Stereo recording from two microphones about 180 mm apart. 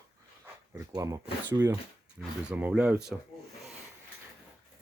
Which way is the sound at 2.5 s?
10° right (ahead or behind).